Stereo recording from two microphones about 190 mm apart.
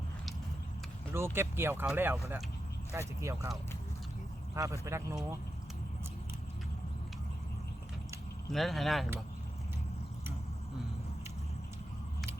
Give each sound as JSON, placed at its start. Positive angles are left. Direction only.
{"t": 1.1, "sound": "speech", "side_deg": -10}
{"t": 4.5, "sound": "speech", "side_deg": -15}
{"t": 8.5, "sound": "speech", "side_deg": 0}